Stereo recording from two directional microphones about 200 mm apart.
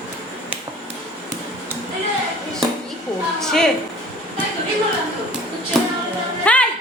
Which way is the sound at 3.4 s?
5° left (ahead or behind).